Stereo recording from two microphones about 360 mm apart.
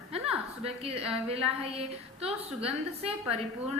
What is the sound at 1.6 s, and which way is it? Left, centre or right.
A woman's voice, centre.